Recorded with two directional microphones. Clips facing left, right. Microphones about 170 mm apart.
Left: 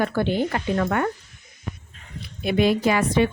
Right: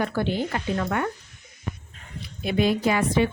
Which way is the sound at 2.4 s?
70° left (ahead or behind).